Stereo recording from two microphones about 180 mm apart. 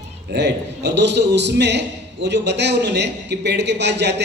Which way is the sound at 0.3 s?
70° right (ahead or behind).